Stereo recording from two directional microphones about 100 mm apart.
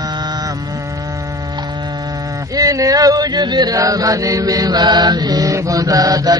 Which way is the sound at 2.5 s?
35° right (ahead or behind).